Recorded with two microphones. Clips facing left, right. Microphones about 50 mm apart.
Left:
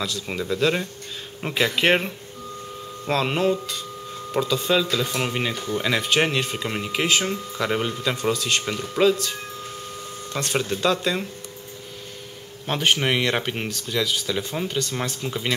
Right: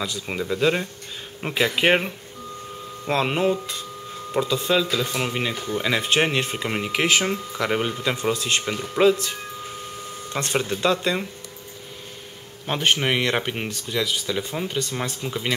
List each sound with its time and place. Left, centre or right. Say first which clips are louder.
0.0 s speech: even; centre
6.3 s speech: right 1 dB; right
6.9 s speech: right 1 dB; right
7.7 s speech: right 1 dB; centre
8.6 s speech: right 1 dB; centre
9.0 s speech: right 1 dB; right
12.6 s speech: even; centre